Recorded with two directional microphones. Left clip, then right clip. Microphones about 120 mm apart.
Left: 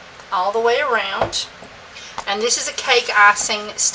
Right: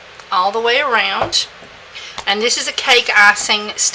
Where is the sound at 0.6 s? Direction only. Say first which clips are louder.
Right 3 dB; 45° right (ahead or behind).